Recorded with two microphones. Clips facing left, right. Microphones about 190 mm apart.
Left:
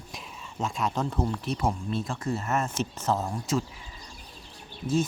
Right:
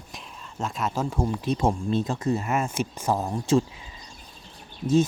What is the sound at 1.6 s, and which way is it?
Speech, 25° right (ahead or behind).